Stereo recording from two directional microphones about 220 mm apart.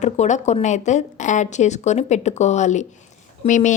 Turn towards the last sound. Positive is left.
turn(degrees=35)  # may be behind; listen again after turning